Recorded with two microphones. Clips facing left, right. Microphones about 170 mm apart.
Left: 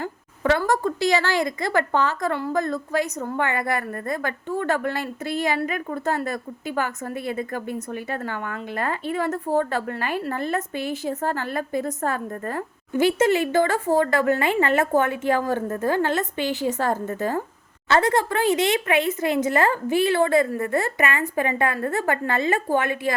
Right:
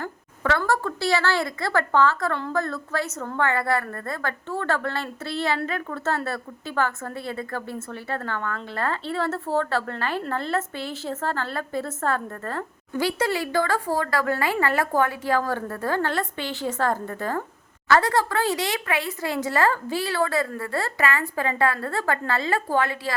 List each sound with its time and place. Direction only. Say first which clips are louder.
0.0 s a woman's voice: left 3 dB; 15° left (ahead or behind)